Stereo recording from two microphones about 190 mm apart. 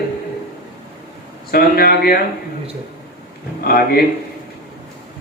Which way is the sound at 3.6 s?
50° left (ahead or behind).